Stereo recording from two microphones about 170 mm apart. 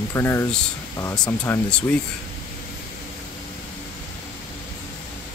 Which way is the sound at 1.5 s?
5° left (ahead or behind).